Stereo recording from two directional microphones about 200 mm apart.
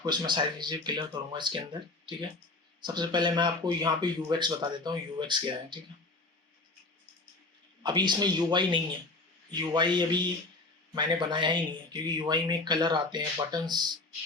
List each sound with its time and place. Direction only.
0.0 s speech: 20° right (ahead or behind)
2.8 s speech: 20° right (ahead or behind)
7.8 s speech: 20° right (ahead or behind)